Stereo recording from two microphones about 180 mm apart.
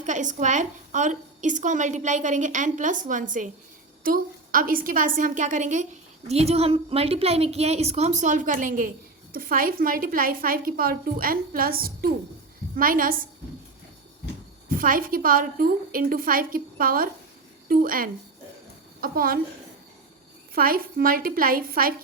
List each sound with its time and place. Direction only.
0.0 s a woman's voice: 45° right (ahead or behind)
14.7 s a woman's voice: 50° right (ahead or behind)
20.6 s a woman's voice: 55° right (ahead or behind)